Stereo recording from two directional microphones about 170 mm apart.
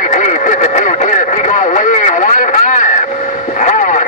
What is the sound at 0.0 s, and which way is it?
Radio, 45° left (ahead or behind).